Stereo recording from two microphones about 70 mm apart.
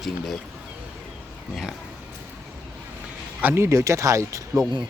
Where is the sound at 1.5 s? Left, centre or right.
Centre.